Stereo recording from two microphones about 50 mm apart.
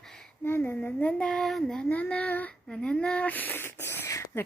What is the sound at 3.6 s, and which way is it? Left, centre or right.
Speech, left.